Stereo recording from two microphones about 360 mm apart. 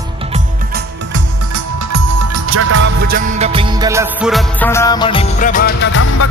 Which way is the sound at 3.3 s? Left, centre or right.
Centre.